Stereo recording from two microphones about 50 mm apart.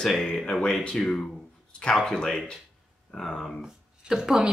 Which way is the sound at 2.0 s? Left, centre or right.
Centre.